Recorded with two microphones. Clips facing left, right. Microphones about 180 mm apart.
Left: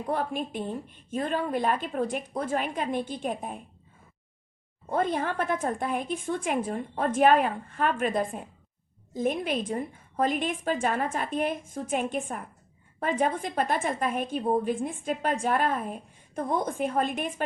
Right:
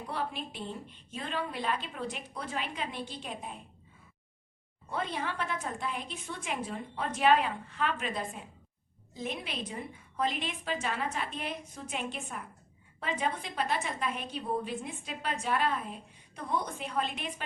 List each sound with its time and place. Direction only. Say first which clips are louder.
0.1 s a woman's voice: left 8 dB; 50° left (ahead or behind)
4.9 s a woman's voice: left 8 dB; 45° left (ahead or behind)